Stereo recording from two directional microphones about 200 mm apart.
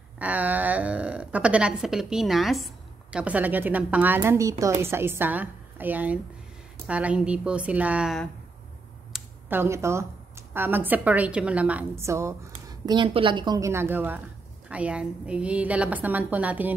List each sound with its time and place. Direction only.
0.2 s a woman's voice: 10° right (ahead or behind)